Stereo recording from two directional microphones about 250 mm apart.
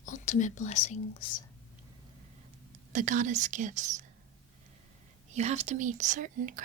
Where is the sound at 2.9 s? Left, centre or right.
Right.